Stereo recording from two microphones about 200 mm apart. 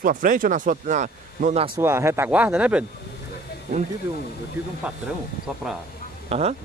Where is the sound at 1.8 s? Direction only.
15° right (ahead or behind).